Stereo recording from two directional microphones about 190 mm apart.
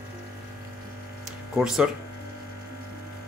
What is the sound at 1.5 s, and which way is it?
Speech, 5° right (ahead or behind).